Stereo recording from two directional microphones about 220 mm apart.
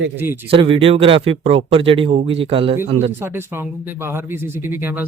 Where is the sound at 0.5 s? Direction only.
25° right (ahead or behind).